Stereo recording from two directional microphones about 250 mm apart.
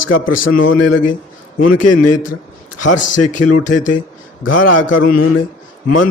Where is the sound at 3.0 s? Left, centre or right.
Left.